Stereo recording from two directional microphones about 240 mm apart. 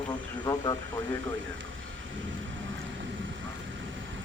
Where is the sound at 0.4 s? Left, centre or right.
Centre.